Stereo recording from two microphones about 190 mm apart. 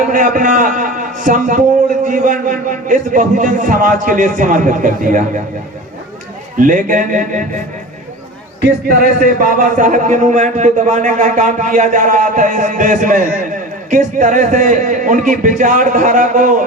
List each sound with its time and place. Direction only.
0.1 s a man's voice: 45° right (ahead or behind)
6.6 s a man's voice: 45° right (ahead or behind)
9.0 s a man's voice: 45° right (ahead or behind)